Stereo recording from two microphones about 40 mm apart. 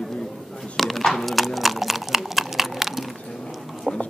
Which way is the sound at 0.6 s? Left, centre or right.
Centre.